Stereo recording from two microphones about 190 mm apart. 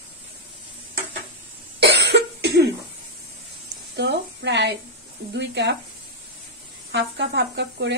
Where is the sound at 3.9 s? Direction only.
65° right (ahead or behind).